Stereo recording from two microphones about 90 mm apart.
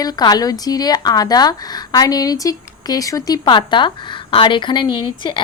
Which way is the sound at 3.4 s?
60° left (ahead or behind).